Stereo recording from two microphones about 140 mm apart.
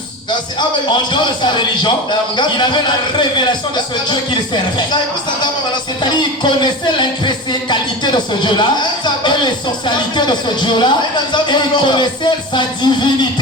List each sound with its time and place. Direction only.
0.9 s speech: 35° left (ahead or behind)